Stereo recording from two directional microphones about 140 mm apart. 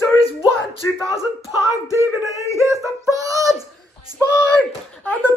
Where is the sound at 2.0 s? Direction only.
20° right (ahead or behind).